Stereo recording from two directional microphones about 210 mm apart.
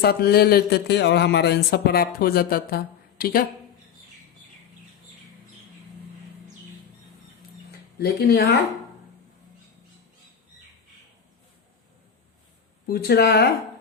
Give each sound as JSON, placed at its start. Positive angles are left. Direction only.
{"t": 0.0, "sound": "speech", "side_deg": 50}
{"t": 7.9, "sound": "speech", "side_deg": 50}
{"t": 12.9, "sound": "speech", "side_deg": 45}